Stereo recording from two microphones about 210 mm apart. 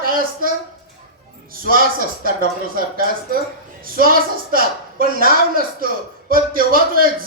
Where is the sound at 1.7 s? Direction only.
45° right (ahead or behind).